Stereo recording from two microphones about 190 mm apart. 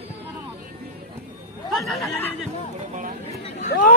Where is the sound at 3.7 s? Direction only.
50° left (ahead or behind).